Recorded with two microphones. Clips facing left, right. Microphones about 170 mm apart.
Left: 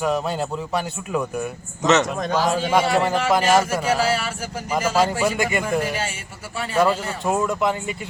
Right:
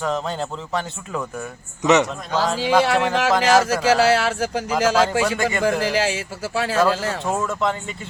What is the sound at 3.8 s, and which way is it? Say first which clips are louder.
Speech: right 4 dB; 80° right.